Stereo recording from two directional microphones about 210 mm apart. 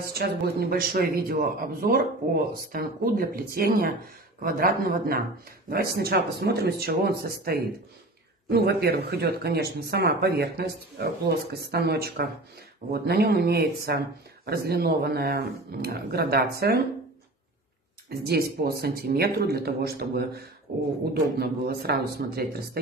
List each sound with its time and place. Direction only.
0.0 s a man's voice: 45° right (ahead or behind)
18.2 s a man's voice: 50° right (ahead or behind)